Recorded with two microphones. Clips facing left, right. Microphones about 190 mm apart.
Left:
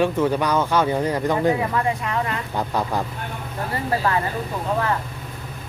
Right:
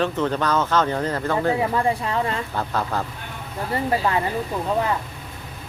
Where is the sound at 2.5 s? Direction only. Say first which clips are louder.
Left 1 dB; 15° left (ahead or behind).